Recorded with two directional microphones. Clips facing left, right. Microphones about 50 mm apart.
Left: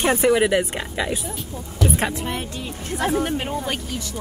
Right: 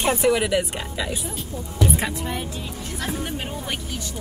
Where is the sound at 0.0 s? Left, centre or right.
Left.